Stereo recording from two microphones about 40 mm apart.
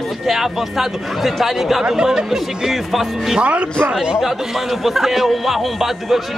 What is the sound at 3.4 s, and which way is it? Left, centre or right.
Speech, right.